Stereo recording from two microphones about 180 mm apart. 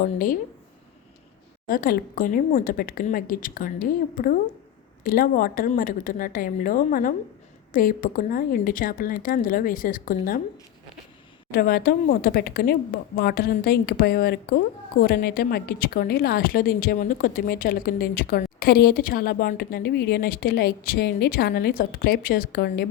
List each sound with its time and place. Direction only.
0.0 s speech: 50° left (ahead or behind)
1.6 s speech: 55° left (ahead or behind)
11.5 s a woman's voice: 55° left (ahead or behind)